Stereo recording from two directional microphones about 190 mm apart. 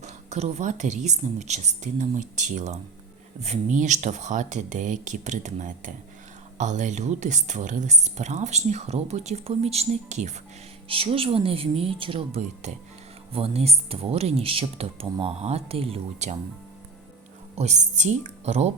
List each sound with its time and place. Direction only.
0.0 s speech: 35° right (ahead or behind)
17.5 s speech: 35° right (ahead or behind)